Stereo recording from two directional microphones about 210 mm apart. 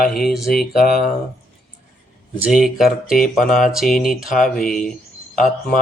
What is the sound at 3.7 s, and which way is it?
Speech, centre (ahead or behind).